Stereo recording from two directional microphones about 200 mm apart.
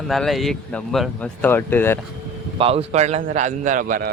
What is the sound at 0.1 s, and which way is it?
Speech, centre (ahead or behind).